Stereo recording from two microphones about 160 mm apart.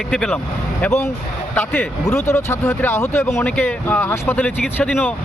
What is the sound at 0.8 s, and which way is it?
Speech, 15° left (ahead or behind).